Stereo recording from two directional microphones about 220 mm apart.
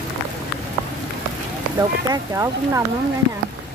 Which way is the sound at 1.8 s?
15° right (ahead or behind).